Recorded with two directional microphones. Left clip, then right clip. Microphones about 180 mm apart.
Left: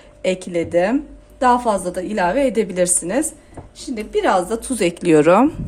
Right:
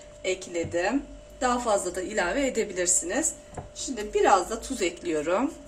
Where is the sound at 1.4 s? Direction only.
50° left (ahead or behind).